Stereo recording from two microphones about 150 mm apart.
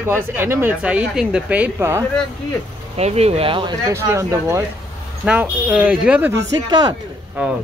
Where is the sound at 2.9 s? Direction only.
45° right (ahead or behind).